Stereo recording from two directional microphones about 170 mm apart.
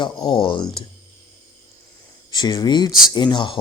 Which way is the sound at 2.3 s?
25° left (ahead or behind).